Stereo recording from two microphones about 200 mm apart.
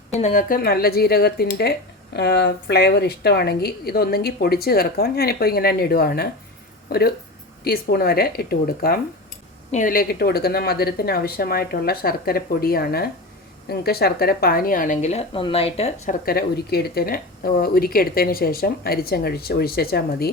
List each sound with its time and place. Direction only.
0.1 s speech: 35° left (ahead or behind)
16.2 s speech: 50° left (ahead or behind)